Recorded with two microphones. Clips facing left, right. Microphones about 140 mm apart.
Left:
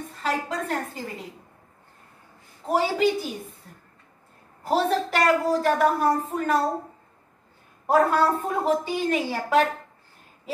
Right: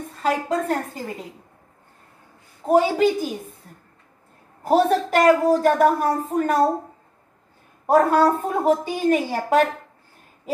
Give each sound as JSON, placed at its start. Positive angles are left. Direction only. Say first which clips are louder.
{"t": 0.2, "sound": "a woman's voice", "louder": "right 5 dB", "side_deg": -50}
{"t": 2.7, "sound": "a woman's voice", "louder": "right 5 dB", "side_deg": -50}
{"t": 4.6, "sound": "a woman's voice", "louder": "right 5 dB", "side_deg": -45}
{"t": 7.8, "sound": "a woman's voice", "louder": "right 4 dB", "side_deg": -45}